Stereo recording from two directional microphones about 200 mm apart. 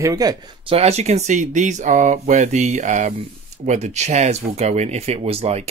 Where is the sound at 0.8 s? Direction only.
30° right (ahead or behind).